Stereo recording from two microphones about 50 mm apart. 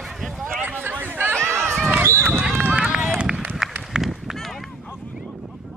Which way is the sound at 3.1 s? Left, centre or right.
Centre.